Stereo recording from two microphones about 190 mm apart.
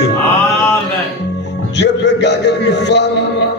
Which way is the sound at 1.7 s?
65° left (ahead or behind).